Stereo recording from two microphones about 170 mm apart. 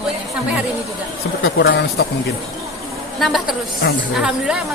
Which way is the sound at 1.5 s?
70° left (ahead or behind).